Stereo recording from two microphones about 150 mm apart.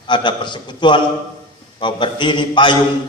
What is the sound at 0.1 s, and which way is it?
A man's voice, 30° left (ahead or behind).